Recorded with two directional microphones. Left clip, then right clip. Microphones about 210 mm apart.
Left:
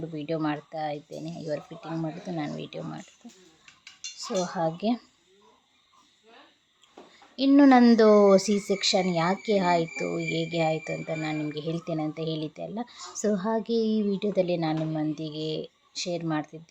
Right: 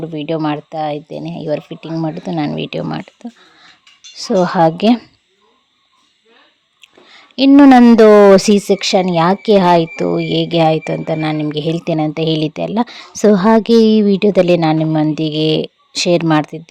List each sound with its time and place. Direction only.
0.0 s speech: 40° right (ahead or behind)
4.2 s a woman's voice: 45° right (ahead or behind)
7.1 s a woman's voice: 40° right (ahead or behind)